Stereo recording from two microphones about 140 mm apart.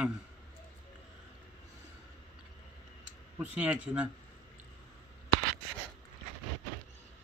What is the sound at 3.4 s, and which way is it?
Speech, 10° right (ahead or behind).